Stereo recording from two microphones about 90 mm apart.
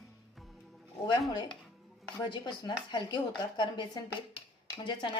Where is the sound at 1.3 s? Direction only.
65° left (ahead or behind).